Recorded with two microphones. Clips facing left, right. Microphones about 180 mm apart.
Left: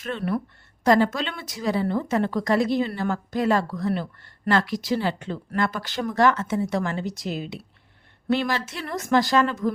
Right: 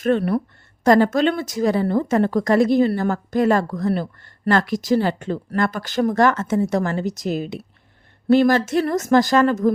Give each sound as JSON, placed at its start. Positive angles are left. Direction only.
{"t": 0.0, "sound": "a woman's voice", "side_deg": -50}